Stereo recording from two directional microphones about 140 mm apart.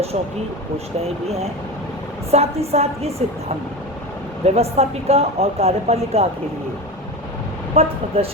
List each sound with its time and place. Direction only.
1.0 s speech: 45° right (ahead or behind)
4.4 s speech: 45° right (ahead or behind)
7.8 s speech: 45° right (ahead or behind)